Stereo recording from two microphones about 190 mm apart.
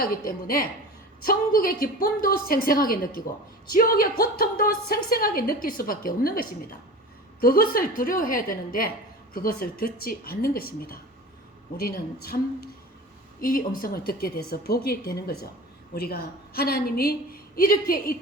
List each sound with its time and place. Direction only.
0.0 s a woman's voice: 50° left (ahead or behind)
13.4 s a woman's voice: 50° left (ahead or behind)